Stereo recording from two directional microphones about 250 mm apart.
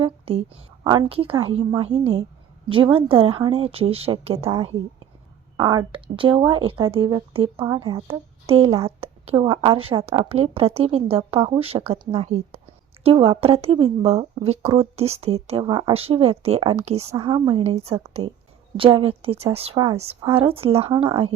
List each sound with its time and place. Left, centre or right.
0.0 s speech: right